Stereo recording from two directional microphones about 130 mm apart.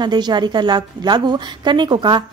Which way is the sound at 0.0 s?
35° right (ahead or behind).